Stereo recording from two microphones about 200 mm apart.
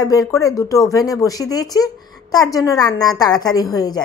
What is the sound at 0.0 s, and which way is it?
A woman's voice, 20° left (ahead or behind).